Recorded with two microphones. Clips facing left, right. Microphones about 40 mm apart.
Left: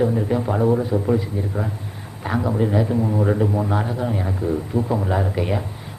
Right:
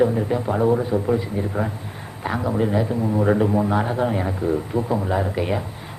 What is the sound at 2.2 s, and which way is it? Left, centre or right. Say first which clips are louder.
Speech: left 1 dB; centre.